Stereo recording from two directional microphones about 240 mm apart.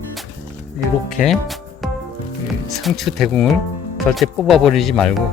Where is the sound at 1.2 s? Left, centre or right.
Centre.